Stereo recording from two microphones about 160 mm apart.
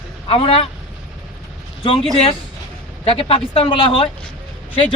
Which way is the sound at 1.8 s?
35° left (ahead or behind).